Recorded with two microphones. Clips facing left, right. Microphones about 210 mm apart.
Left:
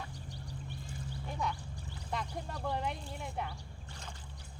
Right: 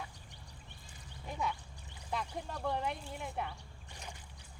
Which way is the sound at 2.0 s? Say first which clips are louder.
Even; centre (ahead or behind).